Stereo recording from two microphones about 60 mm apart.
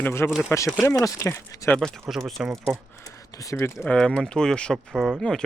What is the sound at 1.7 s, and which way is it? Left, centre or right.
Speech, left.